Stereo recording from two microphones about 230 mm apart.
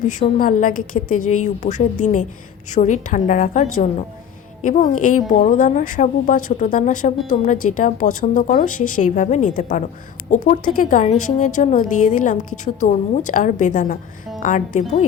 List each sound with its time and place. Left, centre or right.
0.3 s speech: left